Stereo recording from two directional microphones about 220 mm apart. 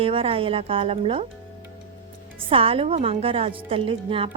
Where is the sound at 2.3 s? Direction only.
25° right (ahead or behind).